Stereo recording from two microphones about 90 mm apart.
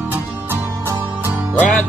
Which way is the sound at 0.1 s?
25° right (ahead or behind).